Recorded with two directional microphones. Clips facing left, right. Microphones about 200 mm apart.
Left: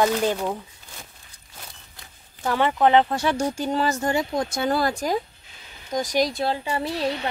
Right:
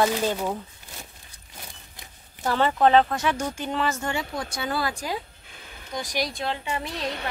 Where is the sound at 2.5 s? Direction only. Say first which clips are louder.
Left 1 dB; 10° left (ahead or behind).